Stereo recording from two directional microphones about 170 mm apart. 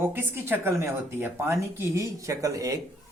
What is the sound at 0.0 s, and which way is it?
Speech, 10° right (ahead or behind).